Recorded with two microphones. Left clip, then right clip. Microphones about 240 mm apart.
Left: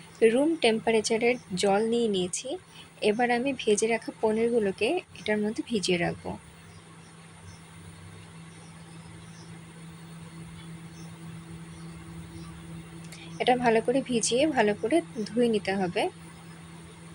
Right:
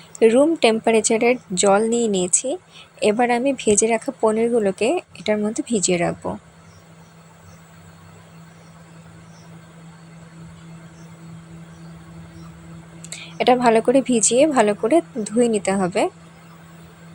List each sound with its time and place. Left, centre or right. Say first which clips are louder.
0.2 s speech: right 8 dB; centre
13.1 s a woman's voice: right 8 dB; centre